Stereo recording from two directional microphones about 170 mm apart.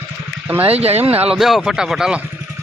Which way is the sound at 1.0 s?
10° right (ahead or behind).